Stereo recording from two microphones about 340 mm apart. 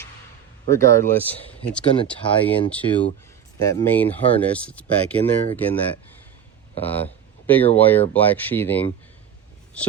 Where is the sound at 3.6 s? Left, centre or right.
Centre.